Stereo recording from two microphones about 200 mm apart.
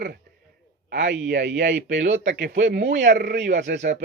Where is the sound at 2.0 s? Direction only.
35° right (ahead or behind).